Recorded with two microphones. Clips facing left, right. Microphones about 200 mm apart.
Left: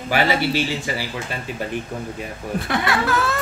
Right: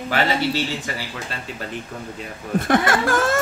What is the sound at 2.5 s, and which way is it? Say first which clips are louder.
Speech: right 4 dB; 50° right (ahead or behind).